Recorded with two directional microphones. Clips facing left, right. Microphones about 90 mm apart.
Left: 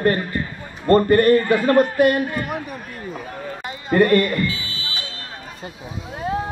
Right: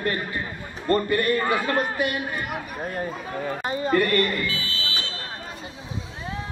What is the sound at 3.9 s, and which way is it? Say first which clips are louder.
Speech: left 7 dB; 35° left (ahead or behind).